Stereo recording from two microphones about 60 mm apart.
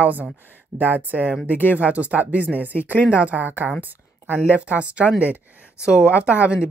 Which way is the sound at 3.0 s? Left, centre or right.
Left.